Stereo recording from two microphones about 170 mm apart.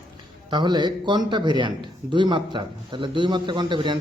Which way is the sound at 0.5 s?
25° right (ahead or behind).